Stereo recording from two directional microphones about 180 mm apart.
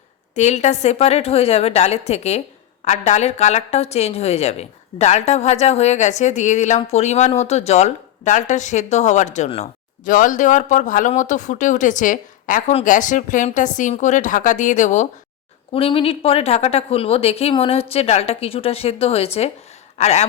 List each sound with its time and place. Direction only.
0.3 s a woman's voice: 40° left (ahead or behind)
15.7 s a woman's voice: 30° left (ahead or behind)